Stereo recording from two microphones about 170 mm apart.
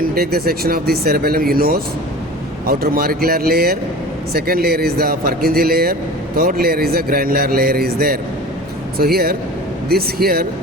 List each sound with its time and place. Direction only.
0.0 s speech: 65° right (ahead or behind)